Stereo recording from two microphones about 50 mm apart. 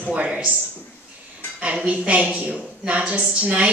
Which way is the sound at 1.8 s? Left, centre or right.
Right.